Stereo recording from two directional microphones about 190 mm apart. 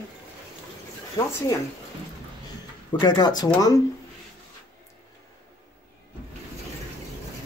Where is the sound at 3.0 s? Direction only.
20° left (ahead or behind).